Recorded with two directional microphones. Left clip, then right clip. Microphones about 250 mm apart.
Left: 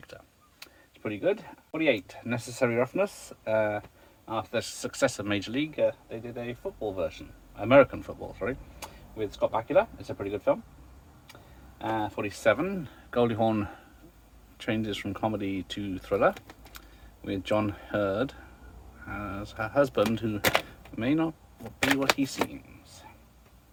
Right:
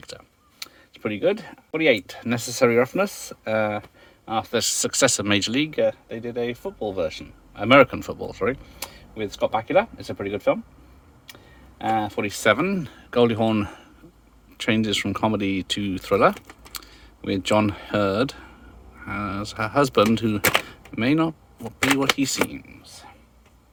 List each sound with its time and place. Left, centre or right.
0.1 s speech: right
11.8 s speech: right
20.7 s door: right
21.9 s speech: right